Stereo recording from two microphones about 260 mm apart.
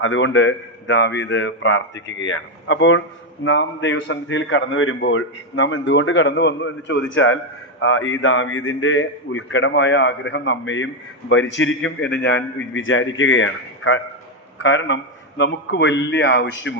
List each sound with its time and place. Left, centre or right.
0.0 s a man's voice: left